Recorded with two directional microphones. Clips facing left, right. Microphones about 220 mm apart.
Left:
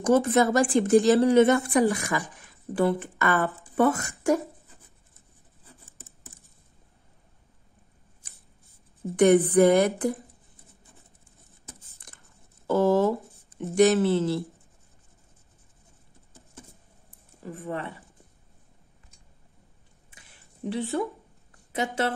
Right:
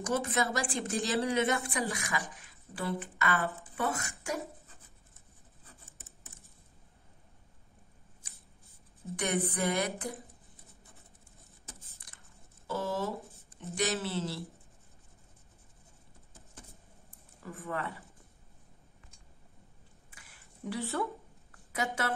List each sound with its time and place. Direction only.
0.1 s speech: 50° left (ahead or behind)
5.7 s a sound: 35° left (ahead or behind)
9.1 s speech: 50° left (ahead or behind)
12.6 s speech: 50° left (ahead or behind)
17.4 s speech: 30° left (ahead or behind)
20.1 s a sound: 25° left (ahead or behind)
21.7 s a woman's voice: 30° left (ahead or behind)